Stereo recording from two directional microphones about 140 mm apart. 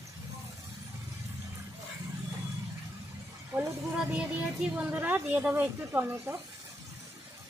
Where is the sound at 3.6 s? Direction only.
10° right (ahead or behind).